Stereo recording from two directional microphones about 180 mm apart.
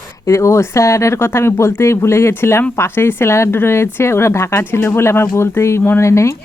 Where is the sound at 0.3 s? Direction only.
15° left (ahead or behind).